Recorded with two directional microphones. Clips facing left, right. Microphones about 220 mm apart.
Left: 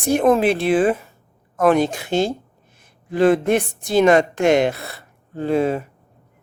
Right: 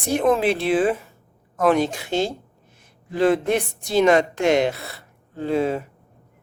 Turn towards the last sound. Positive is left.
turn(degrees=55)  # may be behind; listen again after turning